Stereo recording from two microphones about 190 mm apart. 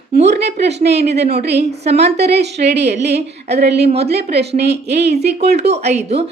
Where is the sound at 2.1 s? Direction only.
60° right (ahead or behind).